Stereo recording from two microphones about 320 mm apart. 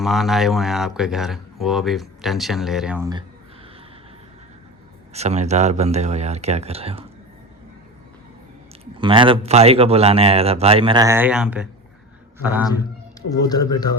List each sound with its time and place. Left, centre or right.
0.0 s speech: centre
5.1 s speech: right
8.8 s speech: centre
13.3 s speech: centre